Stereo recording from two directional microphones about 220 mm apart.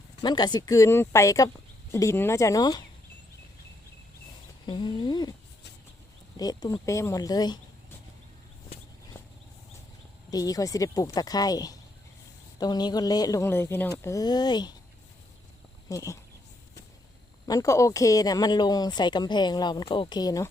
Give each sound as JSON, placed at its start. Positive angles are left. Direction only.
{"t": 0.2, "sound": "speech", "side_deg": 20}
{"t": 4.6, "sound": "speech", "side_deg": 20}
{"t": 6.3, "sound": "speech", "side_deg": 15}
{"t": 10.3, "sound": "speech", "side_deg": 15}
{"t": 15.9, "sound": "speech", "side_deg": 15}
{"t": 17.4, "sound": "speech", "side_deg": 15}